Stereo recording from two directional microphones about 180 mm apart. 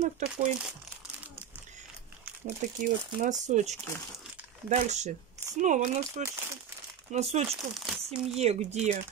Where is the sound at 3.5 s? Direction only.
40° right (ahead or behind).